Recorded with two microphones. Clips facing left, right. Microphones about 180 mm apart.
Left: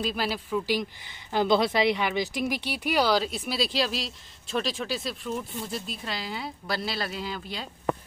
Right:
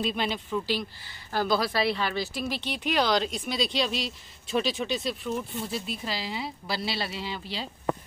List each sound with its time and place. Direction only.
0.0 s speech: 5° left (ahead or behind)